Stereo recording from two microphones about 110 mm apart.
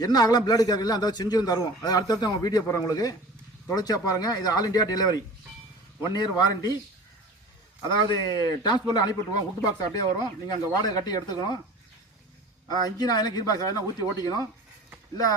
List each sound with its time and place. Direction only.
0.0 s a man's voice: 35° left (ahead or behind)
7.9 s a man's voice: 40° left (ahead or behind)
12.6 s a man's voice: 40° left (ahead or behind)